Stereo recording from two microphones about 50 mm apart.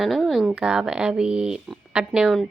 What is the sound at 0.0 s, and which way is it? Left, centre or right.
Speech, centre.